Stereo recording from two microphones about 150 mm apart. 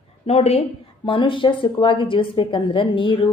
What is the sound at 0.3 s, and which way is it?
A woman's voice, 45° left (ahead or behind).